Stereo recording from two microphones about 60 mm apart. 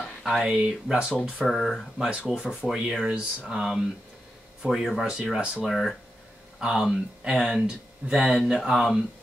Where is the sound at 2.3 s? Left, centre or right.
Centre.